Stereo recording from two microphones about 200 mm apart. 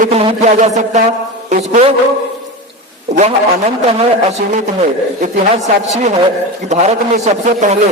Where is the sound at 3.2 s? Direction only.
30° right (ahead or behind).